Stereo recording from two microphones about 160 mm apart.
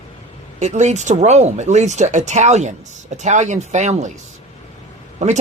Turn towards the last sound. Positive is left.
turn(degrees=-50)  # may be behind; listen again after turning